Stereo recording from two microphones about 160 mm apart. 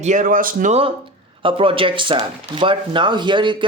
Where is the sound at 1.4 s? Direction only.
35° right (ahead or behind).